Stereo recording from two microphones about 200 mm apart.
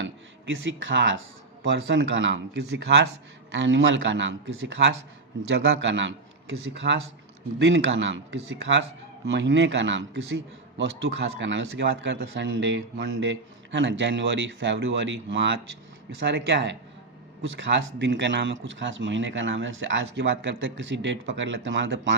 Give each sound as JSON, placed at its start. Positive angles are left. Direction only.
{"t": 0.0, "sound": "speech", "side_deg": -75}
{"t": 6.8, "sound": "speech", "side_deg": -50}
{"t": 7.6, "sound": "speech", "side_deg": -70}
{"t": 17.4, "sound": "speech", "side_deg": -70}